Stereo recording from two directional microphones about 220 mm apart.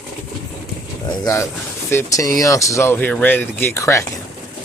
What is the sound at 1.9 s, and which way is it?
Speech, 15° left (ahead or behind).